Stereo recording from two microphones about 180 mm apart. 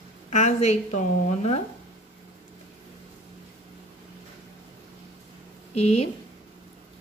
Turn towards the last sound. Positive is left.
turn(degrees=35)  # may be behind; listen again after turning